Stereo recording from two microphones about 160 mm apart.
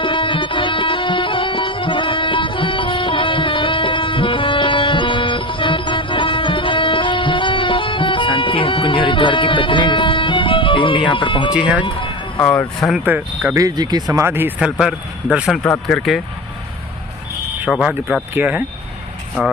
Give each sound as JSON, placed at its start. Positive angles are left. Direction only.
{"t": 0.0, "sound": "music", "side_deg": 30}
{"t": 11.5, "sound": "speech", "side_deg": -5}
{"t": 11.8, "sound": "speech", "side_deg": 30}
{"t": 12.4, "sound": "speech", "side_deg": 10}
{"t": 12.9, "sound": "speech", "side_deg": -10}
{"t": 17.7, "sound": "speech", "side_deg": -5}